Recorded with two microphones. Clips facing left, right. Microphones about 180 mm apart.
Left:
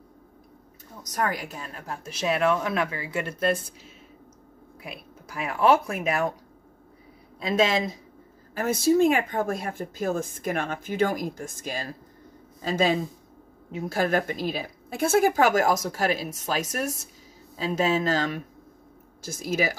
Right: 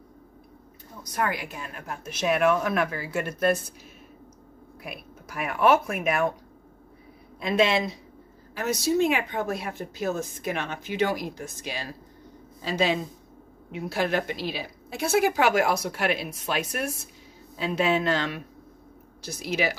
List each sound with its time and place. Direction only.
1.0 s a woman's voice: 40° left (ahead or behind)
4.8 s speech: 25° left (ahead or behind)
7.3 s a woman's voice: 35° left (ahead or behind)
8.5 s a woman's voice: 50° left (ahead or behind)